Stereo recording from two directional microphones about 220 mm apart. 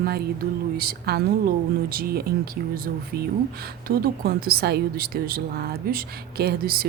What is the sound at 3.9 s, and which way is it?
Speech, 45° right (ahead or behind).